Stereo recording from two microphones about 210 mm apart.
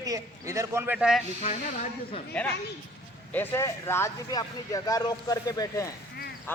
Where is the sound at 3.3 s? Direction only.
10° left (ahead or behind).